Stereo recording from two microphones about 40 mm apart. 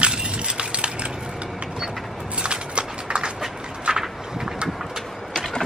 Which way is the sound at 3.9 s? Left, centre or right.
Right.